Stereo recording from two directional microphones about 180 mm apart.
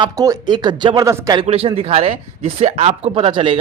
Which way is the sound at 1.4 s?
35° right (ahead or behind).